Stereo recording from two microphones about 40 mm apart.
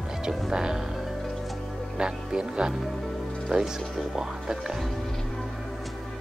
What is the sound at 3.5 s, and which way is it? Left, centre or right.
Speech, right.